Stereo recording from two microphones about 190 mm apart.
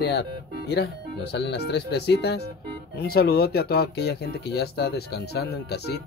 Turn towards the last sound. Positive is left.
turn(degrees=60)  # may be behind; listen again after turning